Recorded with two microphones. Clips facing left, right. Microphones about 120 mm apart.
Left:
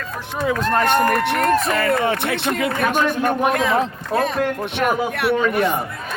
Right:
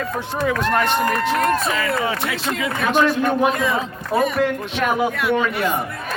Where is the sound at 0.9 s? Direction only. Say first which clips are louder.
Left 2 dB; 55° left (ahead or behind).